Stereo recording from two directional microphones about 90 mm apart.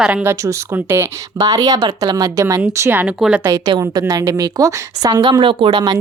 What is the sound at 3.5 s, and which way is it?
A woman's voice, 45° right (ahead or behind).